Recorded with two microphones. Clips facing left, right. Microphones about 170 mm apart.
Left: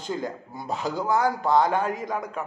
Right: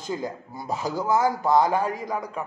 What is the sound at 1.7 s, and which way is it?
Speech, centre (ahead or behind).